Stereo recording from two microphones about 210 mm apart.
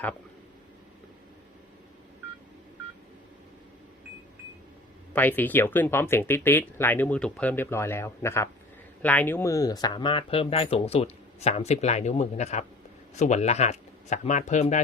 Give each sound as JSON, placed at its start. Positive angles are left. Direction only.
{"t": 5.1, "sound": "speech", "side_deg": 10}